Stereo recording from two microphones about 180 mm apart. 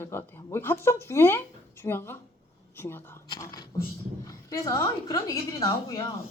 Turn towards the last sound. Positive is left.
turn(degrees=20)  # may be behind; listen again after turning